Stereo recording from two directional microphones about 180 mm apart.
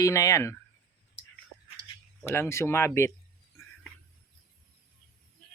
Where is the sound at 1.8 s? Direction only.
65° left (ahead or behind).